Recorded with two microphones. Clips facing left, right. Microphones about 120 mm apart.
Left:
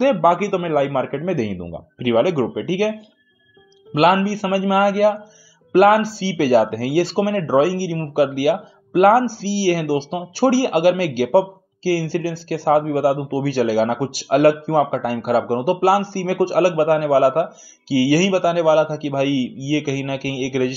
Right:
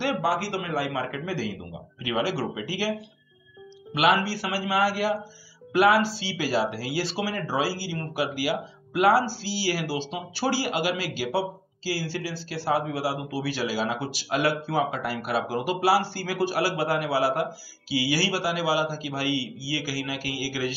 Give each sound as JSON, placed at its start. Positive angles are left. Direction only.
{"t": 0.2, "sound": "speech", "side_deg": 55}
{"t": 3.9, "sound": "speech", "side_deg": 45}